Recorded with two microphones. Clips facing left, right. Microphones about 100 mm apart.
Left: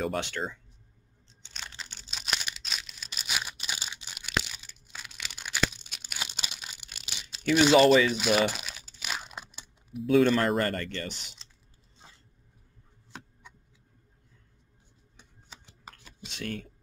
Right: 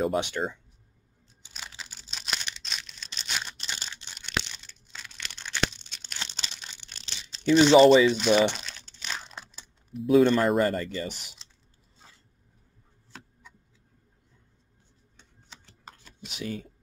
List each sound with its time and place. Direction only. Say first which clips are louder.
0.4 s speech: right 4 dB; 20° right (ahead or behind)
1.4 s a sound: even; 5° right (ahead or behind)
7.6 s speech: right 4 dB; 5° left (ahead or behind)
8.1 s crumpling: right 4 dB; 5° left (ahead or behind)
10.0 s speech: right 2 dB; centre (ahead or behind)
12.0 s a sound: left 1 dB; 20° left (ahead or behind)
13.1 s chopping: left 2 dB; 20° left (ahead or behind)
15.1 s typing: left 1 dB; 10° left (ahead or behind)
16.0 s computer keyboard: right 1 dB; centre (ahead or behind)
16.3 s speech: right 2 dB; 5° right (ahead or behind)